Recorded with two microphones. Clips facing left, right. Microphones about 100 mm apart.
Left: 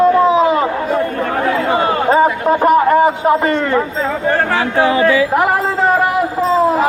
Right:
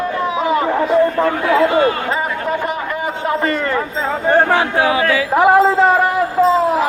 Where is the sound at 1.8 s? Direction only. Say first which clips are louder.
Left 4 dB; 30° left (ahead or behind).